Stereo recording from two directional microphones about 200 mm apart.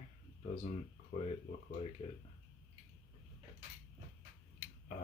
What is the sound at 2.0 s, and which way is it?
Speech, 30° left (ahead or behind).